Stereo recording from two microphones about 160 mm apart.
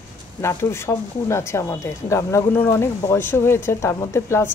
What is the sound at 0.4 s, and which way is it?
Speech, 15° left (ahead or behind).